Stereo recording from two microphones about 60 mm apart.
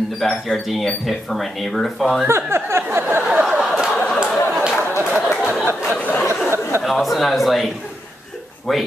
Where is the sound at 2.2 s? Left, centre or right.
Right.